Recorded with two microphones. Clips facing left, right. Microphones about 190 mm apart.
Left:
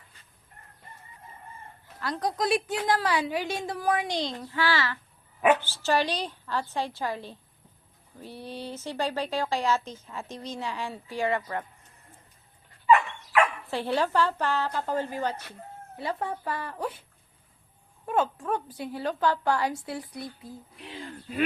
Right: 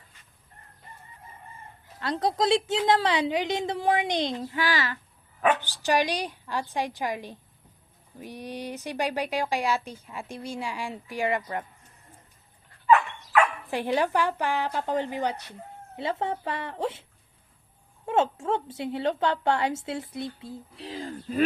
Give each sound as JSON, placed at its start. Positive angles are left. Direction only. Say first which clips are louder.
{"t": 2.0, "sound": "a woman's voice", "louder": "right 3 dB", "side_deg": -25}
{"t": 13.7, "sound": "a woman's voice", "louder": "right 1 dB", "side_deg": -15}